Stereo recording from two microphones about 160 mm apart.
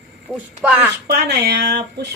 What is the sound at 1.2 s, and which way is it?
Speech, 85° right.